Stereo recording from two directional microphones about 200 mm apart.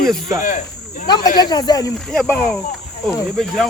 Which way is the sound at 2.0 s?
5° left (ahead or behind).